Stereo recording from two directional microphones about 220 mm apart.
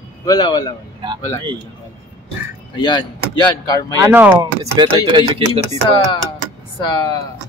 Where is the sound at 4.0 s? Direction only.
10° right (ahead or behind).